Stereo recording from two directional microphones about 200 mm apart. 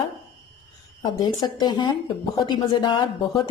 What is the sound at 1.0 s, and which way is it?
A woman's voice, 20° left (ahead or behind).